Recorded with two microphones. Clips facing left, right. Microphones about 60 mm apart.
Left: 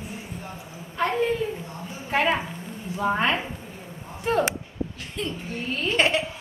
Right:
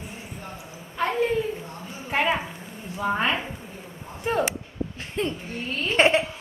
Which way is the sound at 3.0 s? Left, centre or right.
Centre.